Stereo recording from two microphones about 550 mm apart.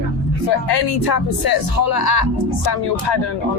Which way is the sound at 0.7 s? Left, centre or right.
Left.